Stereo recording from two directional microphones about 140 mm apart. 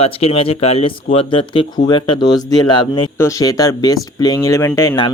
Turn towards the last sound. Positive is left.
turn(degrees=20)  # may be behind; listen again after turning